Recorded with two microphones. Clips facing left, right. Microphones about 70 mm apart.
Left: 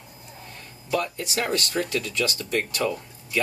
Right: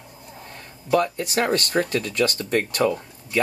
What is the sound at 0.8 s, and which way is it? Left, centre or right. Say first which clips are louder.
Speech: right 6 dB; right.